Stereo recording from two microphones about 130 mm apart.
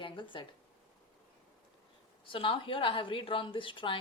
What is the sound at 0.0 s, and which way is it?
Speech, 40° left (ahead or behind).